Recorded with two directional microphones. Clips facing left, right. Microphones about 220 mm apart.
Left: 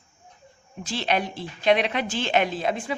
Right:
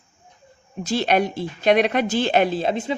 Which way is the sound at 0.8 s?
40° right (ahead or behind).